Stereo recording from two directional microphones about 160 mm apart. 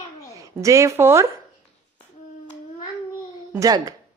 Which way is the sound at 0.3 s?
20° right (ahead or behind).